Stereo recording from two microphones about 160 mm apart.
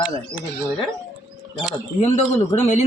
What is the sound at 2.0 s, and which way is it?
Speech, 45° left (ahead or behind).